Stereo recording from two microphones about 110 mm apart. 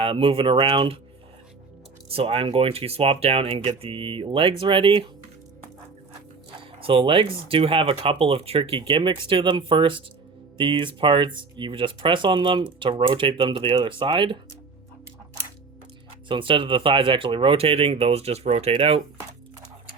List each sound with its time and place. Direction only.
0.0 s speech: 55° right (ahead or behind)
2.0 s speech: 60° right (ahead or behind)
6.7 s speech: 55° right (ahead or behind)
16.3 s speech: 50° right (ahead or behind)